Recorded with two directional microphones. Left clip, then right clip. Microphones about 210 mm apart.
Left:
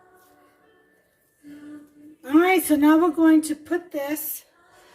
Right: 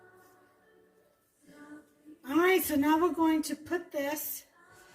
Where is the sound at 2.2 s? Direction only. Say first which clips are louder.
Left 8 dB; 50° left (ahead or behind).